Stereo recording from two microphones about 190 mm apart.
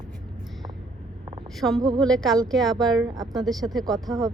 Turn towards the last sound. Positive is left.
turn(degrees=0)  # may be behind; listen again after turning